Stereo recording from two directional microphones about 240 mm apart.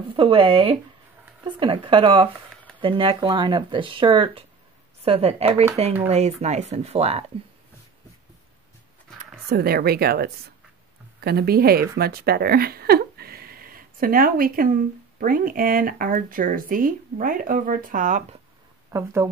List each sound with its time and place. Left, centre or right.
0.1 s speech: right
9.5 s speech: right
18.9 s speech: centre